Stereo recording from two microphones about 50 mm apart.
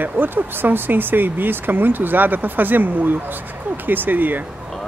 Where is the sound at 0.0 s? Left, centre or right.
Right.